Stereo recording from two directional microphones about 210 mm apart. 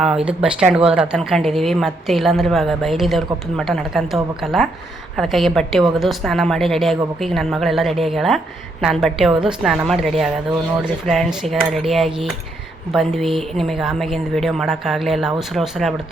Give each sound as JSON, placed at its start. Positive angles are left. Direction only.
{"t": 0.0, "sound": "a woman's voice", "side_deg": -5}